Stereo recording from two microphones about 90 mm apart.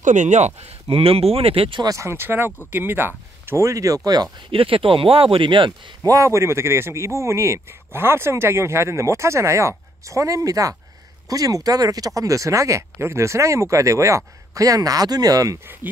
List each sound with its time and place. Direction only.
0.8 s speech: 90° right
2.0 s speech: 30° right (ahead or behind); by 4.3 s 45° right (ahead or behind)
4.5 s speech: 90° right; by 5.7 s 65° right (ahead or behind)
6.0 s speech: 35° right (ahead or behind)